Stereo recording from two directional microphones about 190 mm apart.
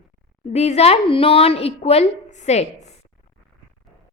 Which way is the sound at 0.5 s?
35° left (ahead or behind).